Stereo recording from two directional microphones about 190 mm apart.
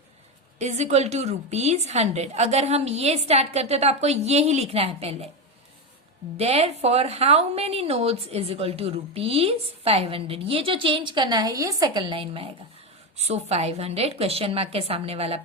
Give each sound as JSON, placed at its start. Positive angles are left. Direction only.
{"t": 0.6, "sound": "a woman's voice", "side_deg": -35}
{"t": 6.3, "sound": "a woman's voice", "side_deg": -30}